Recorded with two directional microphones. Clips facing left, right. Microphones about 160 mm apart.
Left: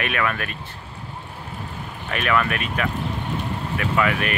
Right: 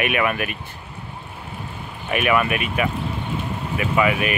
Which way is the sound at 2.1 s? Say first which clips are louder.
Right 3 dB; 10° right (ahead or behind).